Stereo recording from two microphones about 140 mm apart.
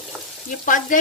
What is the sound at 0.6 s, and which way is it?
Speech, 70° left (ahead or behind).